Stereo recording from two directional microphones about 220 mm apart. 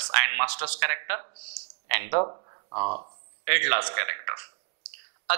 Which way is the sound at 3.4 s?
15° right (ahead or behind).